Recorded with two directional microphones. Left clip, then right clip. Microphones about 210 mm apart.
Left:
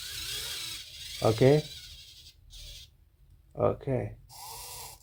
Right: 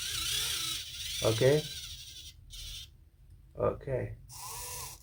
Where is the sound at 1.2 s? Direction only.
45° left (ahead or behind).